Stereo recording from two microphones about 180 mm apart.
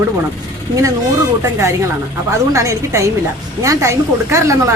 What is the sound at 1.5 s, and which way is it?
A woman's voice, 15° right (ahead or behind).